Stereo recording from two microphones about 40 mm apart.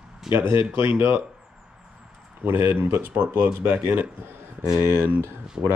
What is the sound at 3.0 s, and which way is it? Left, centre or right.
Speech, right.